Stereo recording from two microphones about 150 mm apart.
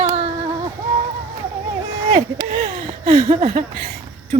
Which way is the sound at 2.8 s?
45° right (ahead or behind).